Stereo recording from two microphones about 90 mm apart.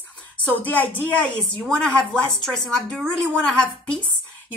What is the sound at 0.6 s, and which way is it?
Speech, 15° left (ahead or behind).